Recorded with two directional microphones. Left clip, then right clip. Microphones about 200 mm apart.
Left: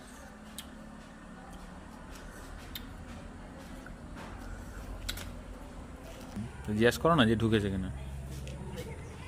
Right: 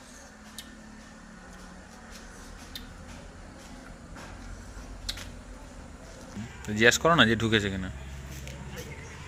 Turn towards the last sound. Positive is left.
turn(degrees=5)  # may be behind; listen again after turning